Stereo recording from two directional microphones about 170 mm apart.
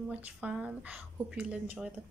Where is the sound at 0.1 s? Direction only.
10° right (ahead or behind).